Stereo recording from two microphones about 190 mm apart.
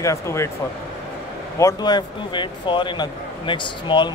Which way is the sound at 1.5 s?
20° left (ahead or behind).